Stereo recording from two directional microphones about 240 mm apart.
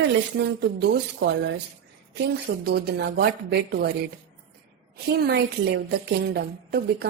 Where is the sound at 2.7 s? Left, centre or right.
Right.